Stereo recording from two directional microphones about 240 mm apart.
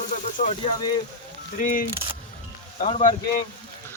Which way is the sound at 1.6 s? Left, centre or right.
Left.